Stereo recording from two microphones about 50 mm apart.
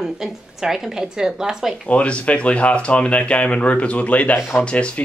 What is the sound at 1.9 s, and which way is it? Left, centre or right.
Speech, left.